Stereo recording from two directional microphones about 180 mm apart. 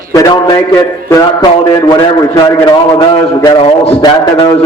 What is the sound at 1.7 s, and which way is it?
A man's voice, 25° left (ahead or behind).